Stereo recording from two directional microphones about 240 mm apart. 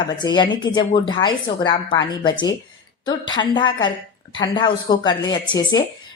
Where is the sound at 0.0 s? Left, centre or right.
Centre.